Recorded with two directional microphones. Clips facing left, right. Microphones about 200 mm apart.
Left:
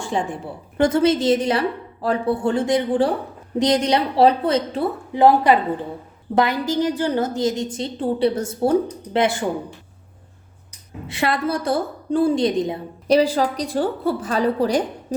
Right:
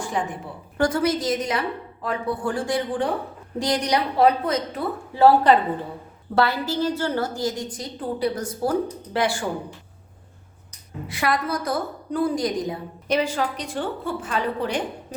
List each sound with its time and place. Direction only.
0.0 s a woman's voice: 30° left (ahead or behind)
5.2 s a woman's voice: 15° left (ahead or behind)
11.1 s a woman's voice: 25° left (ahead or behind)